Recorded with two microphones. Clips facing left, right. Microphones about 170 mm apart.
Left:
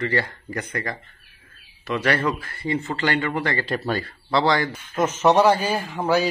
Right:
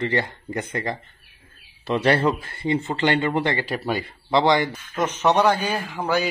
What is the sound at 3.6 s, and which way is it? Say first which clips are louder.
Speech: left 1 dB; 10° right (ahead or behind).